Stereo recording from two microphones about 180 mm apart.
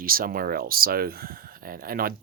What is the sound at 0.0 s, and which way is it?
Speech, 55° right (ahead or behind).